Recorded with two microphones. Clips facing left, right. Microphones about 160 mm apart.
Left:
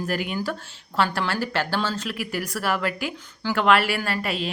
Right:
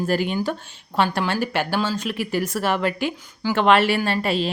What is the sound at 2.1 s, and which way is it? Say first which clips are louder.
Speech: right 5 dB; 25° right (ahead or behind).